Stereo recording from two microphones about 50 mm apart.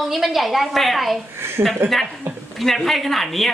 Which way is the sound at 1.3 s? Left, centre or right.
Right.